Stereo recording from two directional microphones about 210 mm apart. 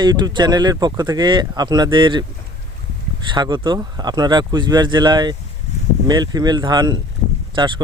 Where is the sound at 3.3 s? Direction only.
20° right (ahead or behind).